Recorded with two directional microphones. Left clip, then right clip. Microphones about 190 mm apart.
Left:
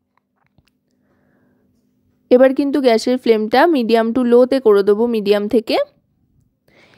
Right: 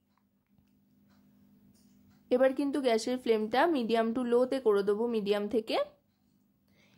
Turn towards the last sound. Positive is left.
turn(degrees=45)  # may be behind; listen again after turning